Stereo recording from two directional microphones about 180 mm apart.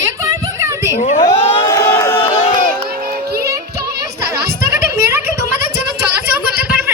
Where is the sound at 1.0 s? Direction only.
40° left (ahead or behind).